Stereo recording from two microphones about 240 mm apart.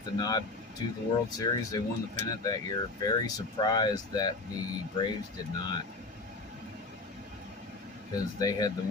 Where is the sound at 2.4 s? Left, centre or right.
Centre.